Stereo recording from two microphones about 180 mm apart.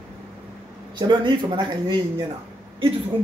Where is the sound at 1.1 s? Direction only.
25° right (ahead or behind).